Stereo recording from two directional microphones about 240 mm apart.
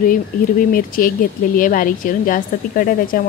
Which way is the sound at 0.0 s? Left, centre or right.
Left.